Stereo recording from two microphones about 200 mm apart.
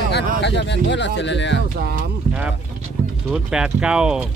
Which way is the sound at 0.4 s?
60° left (ahead or behind).